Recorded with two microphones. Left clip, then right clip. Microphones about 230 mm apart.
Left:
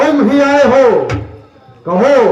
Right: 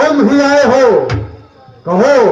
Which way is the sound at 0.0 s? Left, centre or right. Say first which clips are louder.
Even; right.